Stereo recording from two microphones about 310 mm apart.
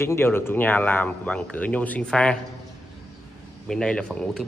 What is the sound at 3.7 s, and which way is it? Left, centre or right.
Speech, centre.